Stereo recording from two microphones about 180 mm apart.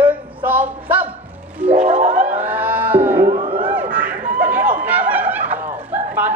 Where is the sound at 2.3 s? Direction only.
10° right (ahead or behind).